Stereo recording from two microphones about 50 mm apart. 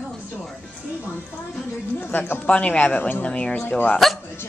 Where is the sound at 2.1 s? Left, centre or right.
Left.